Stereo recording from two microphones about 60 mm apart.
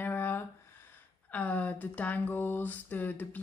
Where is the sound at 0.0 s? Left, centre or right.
Left.